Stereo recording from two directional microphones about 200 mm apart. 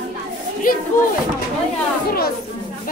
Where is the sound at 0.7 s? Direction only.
45° left (ahead or behind).